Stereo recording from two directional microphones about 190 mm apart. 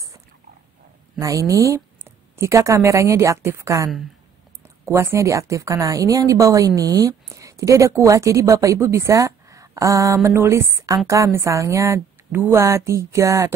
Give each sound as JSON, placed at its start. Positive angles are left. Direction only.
{"t": 1.5, "sound": "a woman's voice", "side_deg": -15}